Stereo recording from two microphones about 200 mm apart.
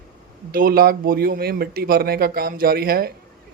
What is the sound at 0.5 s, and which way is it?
A man's voice, 45° right (ahead or behind).